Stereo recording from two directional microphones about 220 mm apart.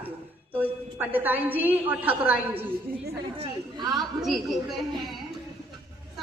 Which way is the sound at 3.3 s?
25° right (ahead or behind).